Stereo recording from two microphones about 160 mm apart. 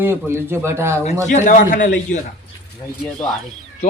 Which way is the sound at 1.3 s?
50° left (ahead or behind).